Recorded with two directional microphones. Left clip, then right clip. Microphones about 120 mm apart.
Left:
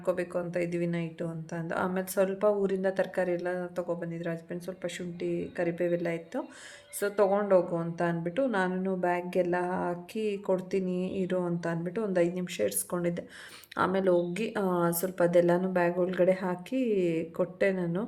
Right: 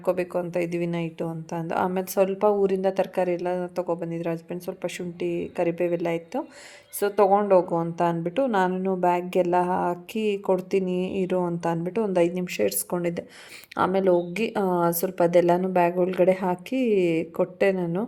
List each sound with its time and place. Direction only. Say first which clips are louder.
0.0 s a woman's voice: right 5 dB; 35° right (ahead or behind)